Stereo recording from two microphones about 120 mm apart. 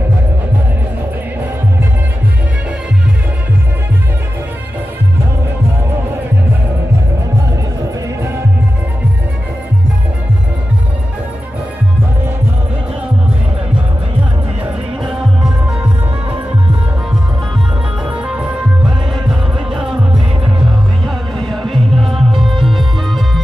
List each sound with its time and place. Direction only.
18.0 s music: 10° right (ahead or behind)